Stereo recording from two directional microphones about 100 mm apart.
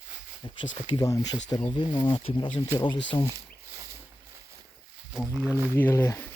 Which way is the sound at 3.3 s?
30° right (ahead or behind).